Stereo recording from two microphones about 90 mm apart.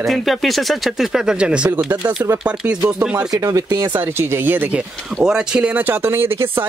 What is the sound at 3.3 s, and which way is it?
Speech, 40° right (ahead or behind).